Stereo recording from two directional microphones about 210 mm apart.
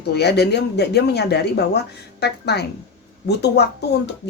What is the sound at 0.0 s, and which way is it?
Speech, 50° left (ahead or behind).